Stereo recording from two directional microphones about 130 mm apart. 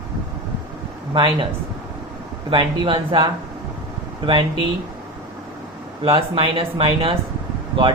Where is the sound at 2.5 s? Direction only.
40° right (ahead or behind).